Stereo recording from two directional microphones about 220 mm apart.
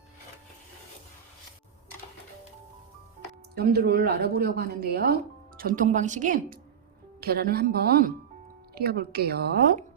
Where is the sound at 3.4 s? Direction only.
45° right (ahead or behind).